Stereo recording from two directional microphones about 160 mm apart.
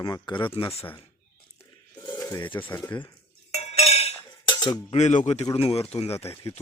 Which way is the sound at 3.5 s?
40° left (ahead or behind).